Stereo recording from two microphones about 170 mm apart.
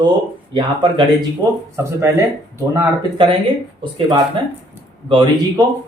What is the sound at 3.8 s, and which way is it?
Speech, 25° right (ahead or behind).